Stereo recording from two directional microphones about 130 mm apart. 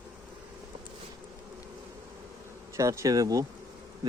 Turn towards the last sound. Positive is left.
turn(degrees=-25)  # may be behind; listen again after turning